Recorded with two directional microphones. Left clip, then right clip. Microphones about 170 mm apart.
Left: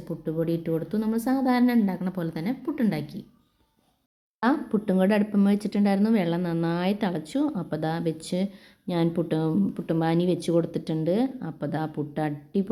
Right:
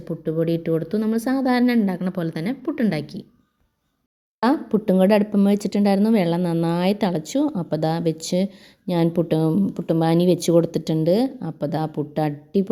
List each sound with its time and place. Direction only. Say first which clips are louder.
0.0 s speech: right 5 dB; 15° right (ahead or behind)
4.4 s speech: right 5 dB; 35° right (ahead or behind)